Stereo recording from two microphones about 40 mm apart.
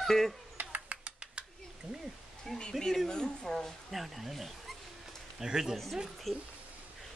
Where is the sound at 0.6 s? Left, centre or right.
Right.